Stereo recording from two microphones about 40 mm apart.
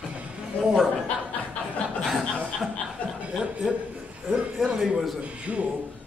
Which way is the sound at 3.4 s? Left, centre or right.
Right.